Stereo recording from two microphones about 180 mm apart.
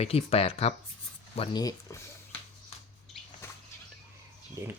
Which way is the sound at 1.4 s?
20° left (ahead or behind).